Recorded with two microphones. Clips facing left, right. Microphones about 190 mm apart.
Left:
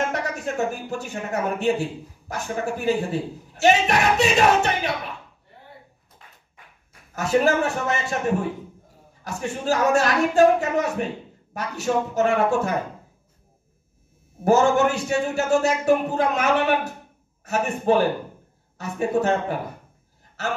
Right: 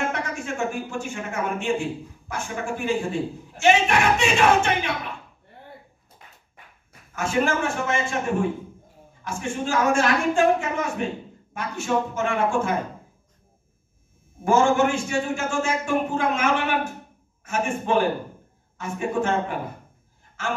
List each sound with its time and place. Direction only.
0.1 s a man's voice: 40° left (ahead or behind)
7.2 s a man's voice: 40° left (ahead or behind)
14.4 s a man's voice: 40° left (ahead or behind)